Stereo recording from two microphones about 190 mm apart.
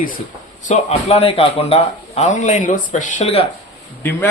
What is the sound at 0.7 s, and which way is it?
Speech, 35° left (ahead or behind).